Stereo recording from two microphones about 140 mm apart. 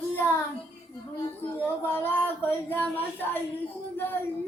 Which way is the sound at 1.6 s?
15° left (ahead or behind).